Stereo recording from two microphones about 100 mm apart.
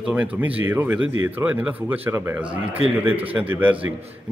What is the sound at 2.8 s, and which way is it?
Speech, 70° right (ahead or behind).